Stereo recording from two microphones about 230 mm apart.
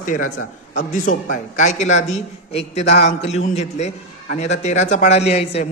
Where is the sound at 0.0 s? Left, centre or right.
Left.